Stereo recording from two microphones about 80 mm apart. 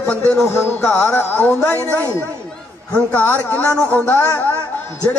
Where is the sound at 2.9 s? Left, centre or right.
Centre.